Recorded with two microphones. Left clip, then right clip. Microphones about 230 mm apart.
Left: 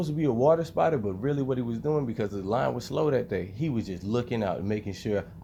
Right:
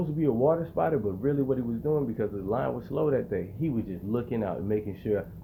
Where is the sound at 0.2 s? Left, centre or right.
Left.